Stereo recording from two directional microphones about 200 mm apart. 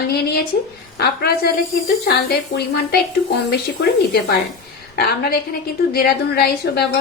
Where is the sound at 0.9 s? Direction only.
55° left (ahead or behind).